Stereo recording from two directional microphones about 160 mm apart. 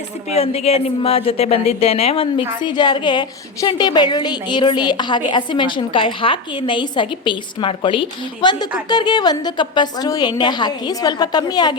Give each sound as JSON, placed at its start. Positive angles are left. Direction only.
{"t": 0.3, "sound": "a woman's voice", "side_deg": 40}